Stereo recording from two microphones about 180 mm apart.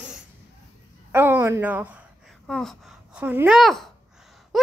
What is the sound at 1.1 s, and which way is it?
A woman's voice, 10° right (ahead or behind).